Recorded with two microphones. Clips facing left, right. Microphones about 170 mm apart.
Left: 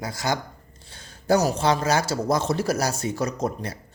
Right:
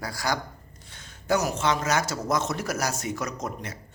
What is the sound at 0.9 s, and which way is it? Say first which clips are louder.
A man's voice: left 4 dB; 35° left (ahead or behind).